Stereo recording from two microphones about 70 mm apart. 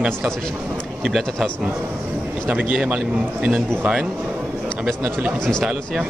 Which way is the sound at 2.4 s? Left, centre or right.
Centre.